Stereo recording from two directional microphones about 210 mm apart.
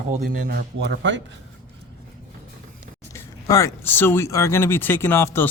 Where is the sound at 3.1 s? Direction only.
15° left (ahead or behind).